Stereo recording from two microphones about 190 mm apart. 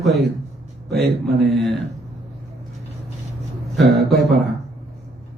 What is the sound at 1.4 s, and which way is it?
Speech, centre (ahead or behind).